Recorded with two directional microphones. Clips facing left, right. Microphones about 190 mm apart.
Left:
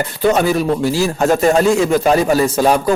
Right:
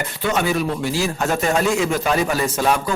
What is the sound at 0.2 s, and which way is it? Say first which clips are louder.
A man's voice: left 6 dB; 40° left (ahead or behind).